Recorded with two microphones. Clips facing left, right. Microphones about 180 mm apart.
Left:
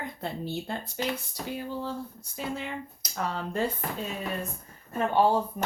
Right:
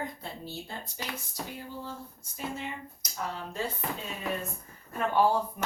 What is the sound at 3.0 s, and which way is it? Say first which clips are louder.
Speech: left 4 dB; 70° left (ahead or behind).